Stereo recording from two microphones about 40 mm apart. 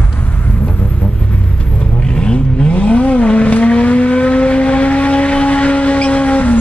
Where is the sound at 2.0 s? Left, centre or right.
Left.